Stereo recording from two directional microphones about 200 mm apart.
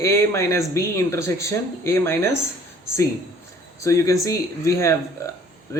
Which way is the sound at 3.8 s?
15° left (ahead or behind).